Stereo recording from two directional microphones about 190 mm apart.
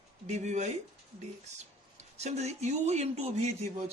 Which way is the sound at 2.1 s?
35° right (ahead or behind).